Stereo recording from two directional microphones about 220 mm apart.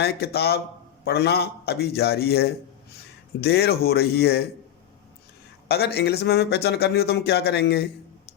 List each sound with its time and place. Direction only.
0.0 s speech: 45° left (ahead or behind)
5.6 s speech: 45° left (ahead or behind)